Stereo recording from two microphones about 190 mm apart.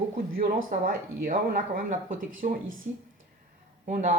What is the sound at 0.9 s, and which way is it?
Speech, 50° right (ahead or behind).